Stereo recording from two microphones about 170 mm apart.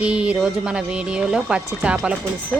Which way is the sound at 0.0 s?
5° right (ahead or behind).